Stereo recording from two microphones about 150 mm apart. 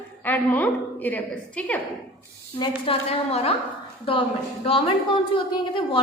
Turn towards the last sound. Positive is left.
turn(degrees=35)  # may be behind; listen again after turning